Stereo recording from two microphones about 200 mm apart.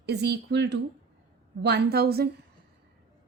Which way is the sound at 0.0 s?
55° right (ahead or behind).